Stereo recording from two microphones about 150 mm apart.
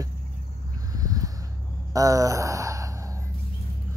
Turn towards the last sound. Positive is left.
turn(degrees=-20)  # may be behind; listen again after turning